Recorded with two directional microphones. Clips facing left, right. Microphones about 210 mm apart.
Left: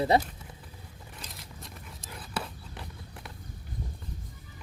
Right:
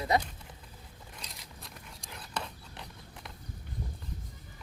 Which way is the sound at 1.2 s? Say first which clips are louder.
Left 4 dB; centre (ahead or behind).